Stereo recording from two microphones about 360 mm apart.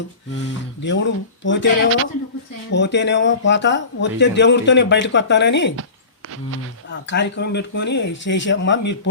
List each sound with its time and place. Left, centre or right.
0.4 s speech: left
7.1 s speech: left